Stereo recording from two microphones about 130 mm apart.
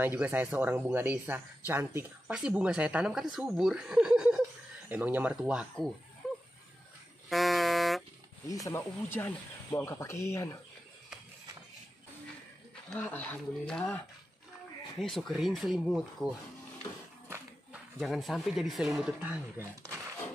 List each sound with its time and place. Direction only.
0.0 s speech: 15° right (ahead or behind)
6.2 s a sound: centre (ahead or behind)
7.2 s music: centre (ahead or behind)
8.5 s speech: 25° left (ahead or behind)
12.9 s speech: 15° left (ahead or behind); by 16.3 s centre (ahead or behind)
17.9 s speech: centre (ahead or behind)